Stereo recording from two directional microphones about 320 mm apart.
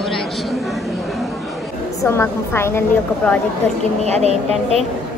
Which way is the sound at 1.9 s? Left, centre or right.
Centre.